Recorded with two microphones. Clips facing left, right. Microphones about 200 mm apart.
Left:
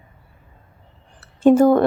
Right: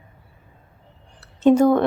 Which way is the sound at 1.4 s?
5° left (ahead or behind).